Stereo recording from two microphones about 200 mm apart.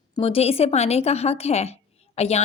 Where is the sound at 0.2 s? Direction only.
30° left (ahead or behind).